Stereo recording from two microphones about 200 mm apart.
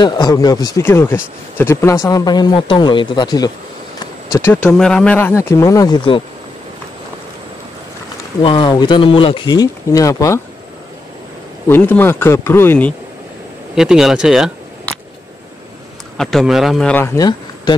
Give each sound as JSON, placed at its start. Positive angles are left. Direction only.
{"t": 0.0, "sound": "speech", "side_deg": 20}
{"t": 8.4, "sound": "speech", "side_deg": 25}
{"t": 11.6, "sound": "speech", "side_deg": 10}
{"t": 13.7, "sound": "speech", "side_deg": 0}
{"t": 16.2, "sound": "speech", "side_deg": 0}